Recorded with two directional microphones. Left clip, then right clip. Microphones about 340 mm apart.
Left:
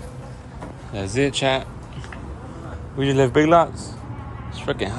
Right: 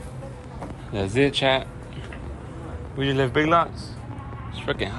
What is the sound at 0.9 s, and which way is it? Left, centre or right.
Speech, centre.